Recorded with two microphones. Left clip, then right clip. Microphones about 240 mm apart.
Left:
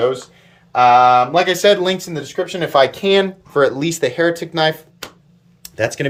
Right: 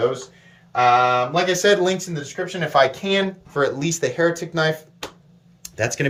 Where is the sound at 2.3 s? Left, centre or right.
Left.